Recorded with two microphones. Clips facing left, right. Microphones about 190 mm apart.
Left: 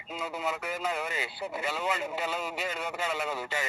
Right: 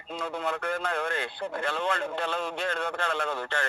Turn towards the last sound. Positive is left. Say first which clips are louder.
# right 2 dB
turn(degrees=5)  # may be behind; listen again after turning